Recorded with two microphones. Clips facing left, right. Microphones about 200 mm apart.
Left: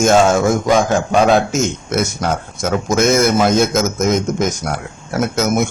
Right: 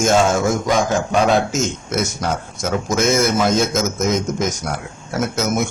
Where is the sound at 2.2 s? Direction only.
55° left (ahead or behind).